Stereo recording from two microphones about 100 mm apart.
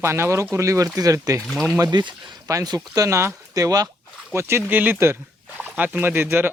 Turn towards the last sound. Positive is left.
turn(degrees=-20)  # may be behind; listen again after turning